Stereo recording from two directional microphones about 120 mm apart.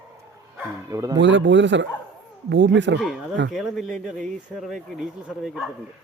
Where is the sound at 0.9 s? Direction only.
25° right (ahead or behind).